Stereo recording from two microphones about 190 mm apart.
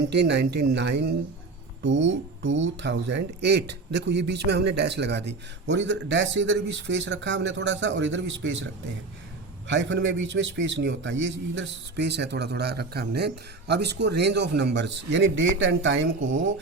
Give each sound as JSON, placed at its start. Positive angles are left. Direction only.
{"t": 0.1, "sound": "a man's voice", "side_deg": -65}